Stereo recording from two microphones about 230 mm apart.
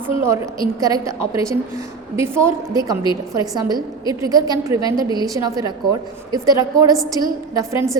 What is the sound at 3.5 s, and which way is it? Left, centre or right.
A woman's voice, centre.